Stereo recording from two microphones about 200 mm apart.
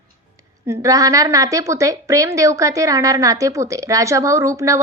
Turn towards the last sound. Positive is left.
turn(degrees=-15)  # may be behind; listen again after turning